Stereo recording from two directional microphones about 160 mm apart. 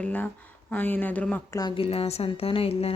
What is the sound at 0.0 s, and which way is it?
Speech, 10° left (ahead or behind).